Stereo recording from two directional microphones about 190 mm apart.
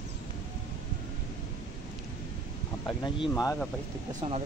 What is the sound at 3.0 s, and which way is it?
Speech, 20° left (ahead or behind).